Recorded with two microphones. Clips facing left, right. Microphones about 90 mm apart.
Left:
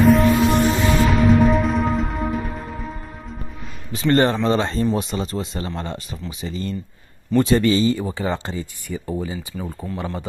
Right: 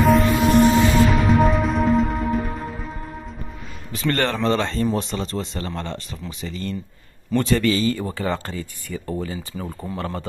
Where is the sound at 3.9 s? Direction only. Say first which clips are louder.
Left 5 dB; 20° left (ahead or behind).